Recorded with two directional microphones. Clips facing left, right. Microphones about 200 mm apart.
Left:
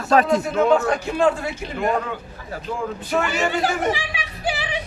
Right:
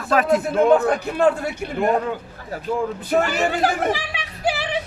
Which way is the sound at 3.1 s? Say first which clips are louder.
Right 3 dB; 40° right (ahead or behind).